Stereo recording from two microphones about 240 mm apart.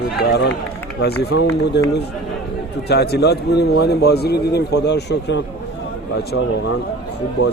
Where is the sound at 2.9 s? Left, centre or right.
Left.